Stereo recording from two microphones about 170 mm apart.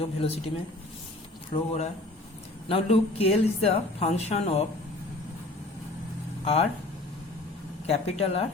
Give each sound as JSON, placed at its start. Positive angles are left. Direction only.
{"t": 0.0, "sound": "a woman's voice", "side_deg": 35}
{"t": 1.5, "sound": "a woman's voice", "side_deg": 40}
{"t": 6.4, "sound": "speech", "side_deg": 35}
{"t": 7.9, "sound": "a woman's voice", "side_deg": 40}